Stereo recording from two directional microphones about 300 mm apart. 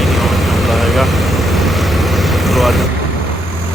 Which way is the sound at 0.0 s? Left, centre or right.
Centre.